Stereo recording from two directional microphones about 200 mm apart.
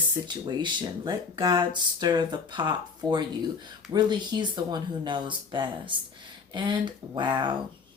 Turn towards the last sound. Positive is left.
turn(degrees=-20)  # may be behind; listen again after turning